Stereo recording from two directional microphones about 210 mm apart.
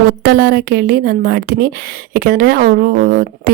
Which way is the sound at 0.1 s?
50° right (ahead or behind).